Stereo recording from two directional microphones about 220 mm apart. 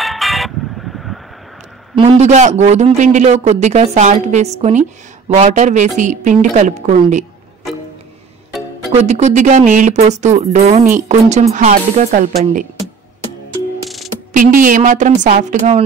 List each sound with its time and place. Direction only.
0.0 s music: centre (ahead or behind)
2.0 s a man's voice: 25° right (ahead or behind)
8.9 s a man's voice: 30° right (ahead or behind)
14.3 s a man's voice: 35° right (ahead or behind)